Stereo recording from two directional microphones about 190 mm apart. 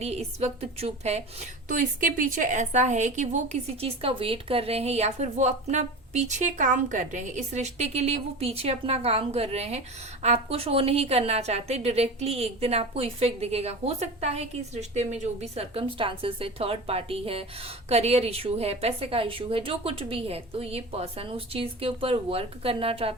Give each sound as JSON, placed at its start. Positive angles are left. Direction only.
{"t": 0.0, "sound": "a woman's voice", "side_deg": -35}